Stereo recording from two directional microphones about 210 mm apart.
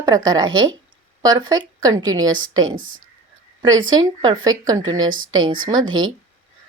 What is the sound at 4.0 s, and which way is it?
Speech, 20° right (ahead or behind).